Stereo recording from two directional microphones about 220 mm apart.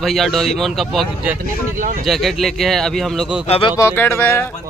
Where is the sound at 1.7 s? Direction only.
35° right (ahead or behind).